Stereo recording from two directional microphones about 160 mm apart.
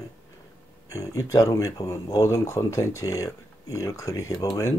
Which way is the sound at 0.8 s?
20° left (ahead or behind).